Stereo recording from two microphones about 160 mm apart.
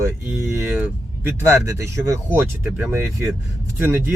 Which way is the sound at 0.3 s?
15° right (ahead or behind).